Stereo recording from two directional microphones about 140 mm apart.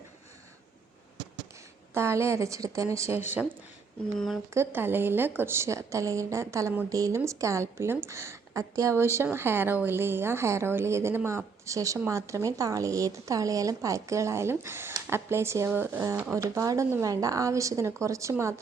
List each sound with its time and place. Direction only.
1.9 s a woman's voice: 20° right (ahead or behind)
4.5 s a woman's voice: 15° right (ahead or behind)